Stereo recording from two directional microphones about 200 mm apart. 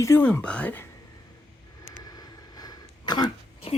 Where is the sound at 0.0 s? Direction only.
10° left (ahead or behind).